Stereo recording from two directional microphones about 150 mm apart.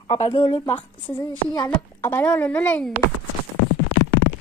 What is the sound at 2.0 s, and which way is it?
Speech, 15° left (ahead or behind).